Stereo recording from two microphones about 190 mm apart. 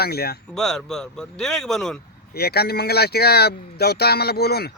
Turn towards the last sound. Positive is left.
turn(degrees=55)  # may be behind; listen again after turning